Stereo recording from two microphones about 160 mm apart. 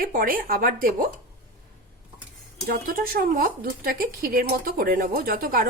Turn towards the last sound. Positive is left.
turn(degrees=-65)  # may be behind; listen again after turning